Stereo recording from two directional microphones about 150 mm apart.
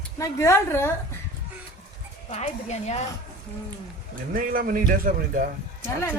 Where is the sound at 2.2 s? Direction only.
50° left (ahead or behind).